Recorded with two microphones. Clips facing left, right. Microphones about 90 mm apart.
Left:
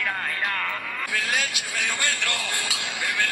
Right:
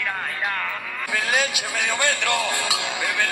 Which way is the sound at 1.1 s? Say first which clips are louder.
Right 5 dB; 55° right (ahead or behind).